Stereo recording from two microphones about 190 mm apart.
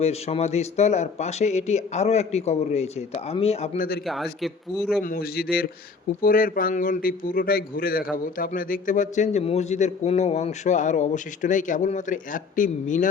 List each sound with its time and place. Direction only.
0.0 s a man's voice: 35° left (ahead or behind)
3.8 s a man's voice: 55° left (ahead or behind)
4.0 s a man's voice: centre (ahead or behind)
5.0 s a man's voice: 50° left (ahead or behind)